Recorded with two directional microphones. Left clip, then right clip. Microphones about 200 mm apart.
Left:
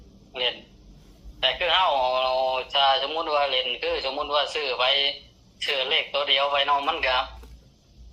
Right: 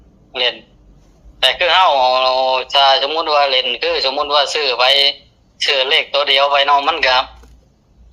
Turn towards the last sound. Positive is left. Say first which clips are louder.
# right 10 dB
turn(degrees=-55)  # may be behind; listen again after turning